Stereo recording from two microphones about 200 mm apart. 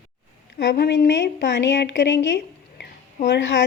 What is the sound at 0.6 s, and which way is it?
A woman's voice, 60° left (ahead or behind).